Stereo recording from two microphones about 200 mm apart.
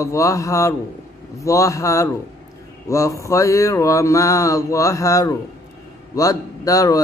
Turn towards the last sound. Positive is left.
turn(degrees=15)  # may be behind; listen again after turning